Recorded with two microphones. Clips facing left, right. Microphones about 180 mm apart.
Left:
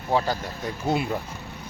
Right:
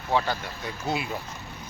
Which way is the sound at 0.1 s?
40° left (ahead or behind).